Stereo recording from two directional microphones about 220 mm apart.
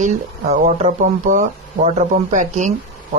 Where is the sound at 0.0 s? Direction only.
35° right (ahead or behind).